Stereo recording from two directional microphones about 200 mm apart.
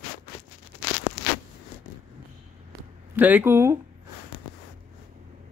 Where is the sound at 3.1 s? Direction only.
10° right (ahead or behind).